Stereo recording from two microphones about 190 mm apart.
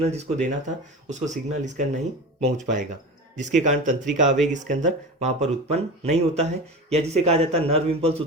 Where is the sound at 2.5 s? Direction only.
40° right (ahead or behind).